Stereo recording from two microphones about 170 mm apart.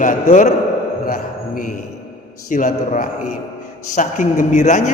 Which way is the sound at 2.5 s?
50° left (ahead or behind).